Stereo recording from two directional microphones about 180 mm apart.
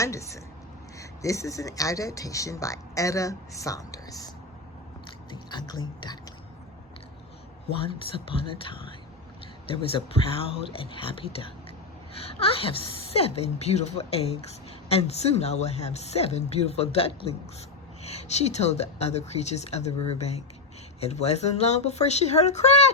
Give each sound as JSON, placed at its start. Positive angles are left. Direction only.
{"t": 0.0, "sound": "speech", "side_deg": 15}
{"t": 5.3, "sound": "speech", "side_deg": 25}
{"t": 7.7, "sound": "a woman's voice", "side_deg": 30}